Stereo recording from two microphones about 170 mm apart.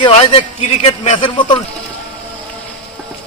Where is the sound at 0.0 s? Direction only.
35° left (ahead or behind).